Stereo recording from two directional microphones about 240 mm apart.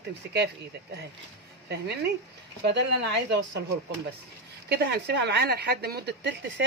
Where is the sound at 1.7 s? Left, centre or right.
Right.